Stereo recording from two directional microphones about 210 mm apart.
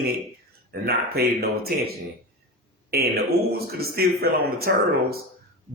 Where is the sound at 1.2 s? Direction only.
45° right (ahead or behind).